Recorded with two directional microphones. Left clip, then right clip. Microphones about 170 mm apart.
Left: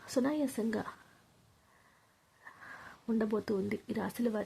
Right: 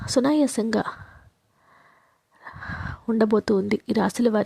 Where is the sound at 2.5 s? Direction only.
45° right (ahead or behind).